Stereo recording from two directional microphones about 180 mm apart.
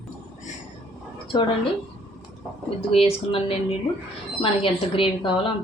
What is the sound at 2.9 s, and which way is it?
Speech, 30° left (ahead or behind).